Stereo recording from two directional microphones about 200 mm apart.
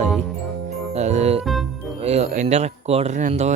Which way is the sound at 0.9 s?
35° right (ahead or behind).